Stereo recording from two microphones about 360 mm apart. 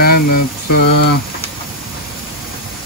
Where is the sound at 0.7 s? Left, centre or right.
Left.